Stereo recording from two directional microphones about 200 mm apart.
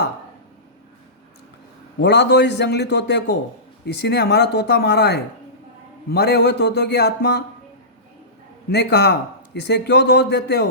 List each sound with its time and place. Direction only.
2.0 s a man's voice: 55° left (ahead or behind)
8.7 s a man's voice: 55° left (ahead or behind)